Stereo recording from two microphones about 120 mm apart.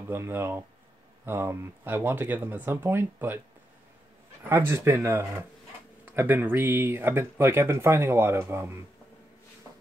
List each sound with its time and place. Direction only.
0.1 s speech: 20° right (ahead or behind)
4.5 s speech: 20° right (ahead or behind)